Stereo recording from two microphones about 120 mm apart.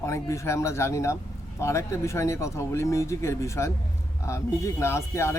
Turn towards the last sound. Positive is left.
turn(degrees=20)  # may be behind; listen again after turning